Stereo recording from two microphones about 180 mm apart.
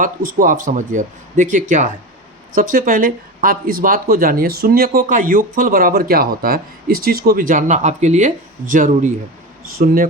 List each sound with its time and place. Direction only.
0.0 s speech: 50° right (ahead or behind)